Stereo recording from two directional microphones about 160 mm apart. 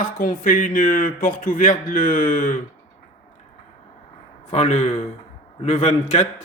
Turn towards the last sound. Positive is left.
turn(degrees=45)  # may be behind; listen again after turning